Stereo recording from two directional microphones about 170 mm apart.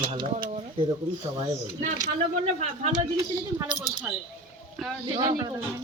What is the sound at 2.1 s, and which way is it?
Speech, 40° right (ahead or behind).